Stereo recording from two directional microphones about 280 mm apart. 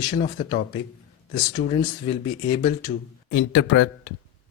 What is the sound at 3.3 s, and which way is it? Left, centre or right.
Speech, left.